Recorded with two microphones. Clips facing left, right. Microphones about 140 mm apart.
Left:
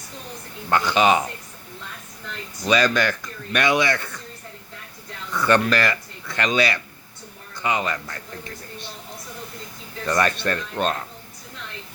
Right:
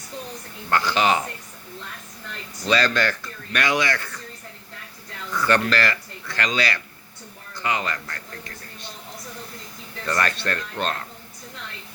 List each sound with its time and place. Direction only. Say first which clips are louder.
0.7 s speech: left 2 dB; 20° left (ahead or behind)
2.6 s speech: left 2 dB; 15° left (ahead or behind)
5.3 s speech: left 2 dB; 20° left (ahead or behind)
10.1 s speech: left 3 dB; 20° left (ahead or behind)